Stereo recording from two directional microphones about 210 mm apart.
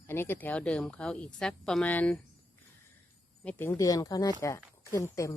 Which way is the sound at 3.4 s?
10° left (ahead or behind).